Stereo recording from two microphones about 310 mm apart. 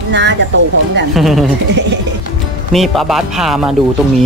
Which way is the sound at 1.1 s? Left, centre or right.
Centre.